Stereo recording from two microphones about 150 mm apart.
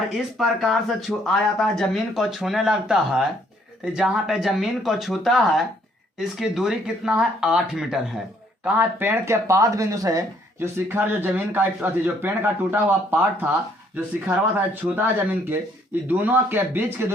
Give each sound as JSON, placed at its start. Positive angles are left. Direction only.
{"t": 0.1, "sound": "speech", "side_deg": 0}